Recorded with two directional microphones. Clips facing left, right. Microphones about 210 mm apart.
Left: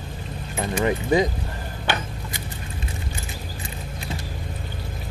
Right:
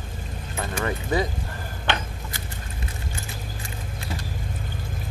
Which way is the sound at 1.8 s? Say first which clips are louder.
Left 1 dB; 10° left (ahead or behind).